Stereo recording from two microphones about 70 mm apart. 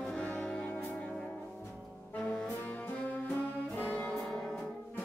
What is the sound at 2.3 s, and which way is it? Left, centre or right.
Brass instrument, centre.